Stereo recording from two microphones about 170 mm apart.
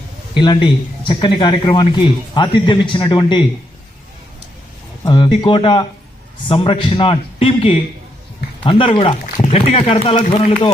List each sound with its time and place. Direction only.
0.3 s a man's voice: 25° left (ahead or behind)
5.0 s a man's voice: 25° left (ahead or behind)